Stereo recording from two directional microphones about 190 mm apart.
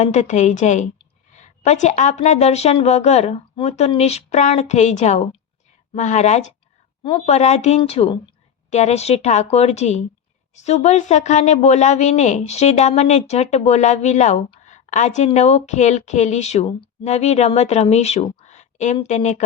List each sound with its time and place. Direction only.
0.0 s a woman's voice: 40° left (ahead or behind)